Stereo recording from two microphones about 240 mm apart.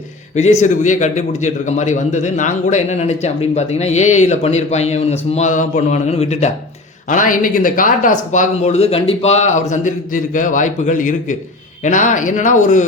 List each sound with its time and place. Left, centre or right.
0.3 s a man's voice: left